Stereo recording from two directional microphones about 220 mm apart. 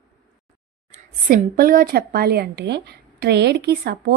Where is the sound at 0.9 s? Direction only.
40° right (ahead or behind).